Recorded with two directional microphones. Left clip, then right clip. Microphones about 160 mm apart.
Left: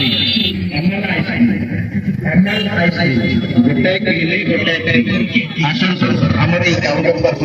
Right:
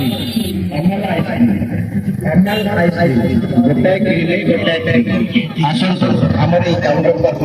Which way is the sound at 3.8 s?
35° right (ahead or behind).